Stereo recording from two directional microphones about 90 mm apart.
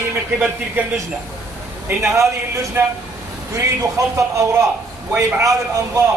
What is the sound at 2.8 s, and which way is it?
Speech, 25° right (ahead or behind).